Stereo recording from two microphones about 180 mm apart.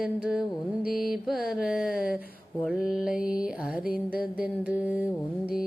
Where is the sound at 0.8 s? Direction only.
55° left (ahead or behind).